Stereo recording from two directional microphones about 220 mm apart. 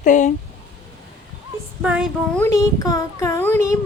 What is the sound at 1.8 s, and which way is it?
Child singing, 5° right (ahead or behind).